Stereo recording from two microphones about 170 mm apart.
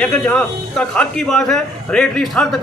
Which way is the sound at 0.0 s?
5° left (ahead or behind).